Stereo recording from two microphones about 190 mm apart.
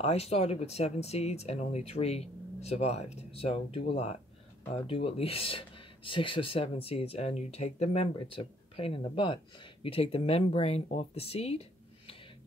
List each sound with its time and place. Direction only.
0.0 s speech: 35° left (ahead or behind)